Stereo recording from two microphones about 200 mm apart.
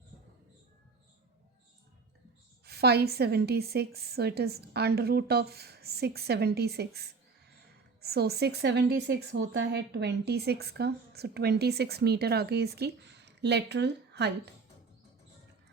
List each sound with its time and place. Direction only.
2.6 s a woman's voice: 55° right (ahead or behind)